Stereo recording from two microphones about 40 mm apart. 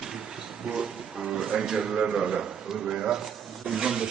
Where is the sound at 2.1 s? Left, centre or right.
Centre.